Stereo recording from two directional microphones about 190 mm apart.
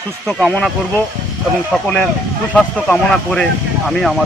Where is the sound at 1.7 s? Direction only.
5° left (ahead or behind).